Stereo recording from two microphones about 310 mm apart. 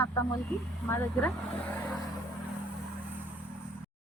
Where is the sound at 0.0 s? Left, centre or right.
Centre.